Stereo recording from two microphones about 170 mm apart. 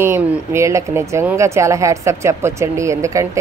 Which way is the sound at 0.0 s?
15° right (ahead or behind).